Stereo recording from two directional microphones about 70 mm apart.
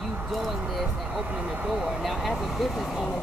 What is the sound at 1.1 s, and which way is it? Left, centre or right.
Speech, centre.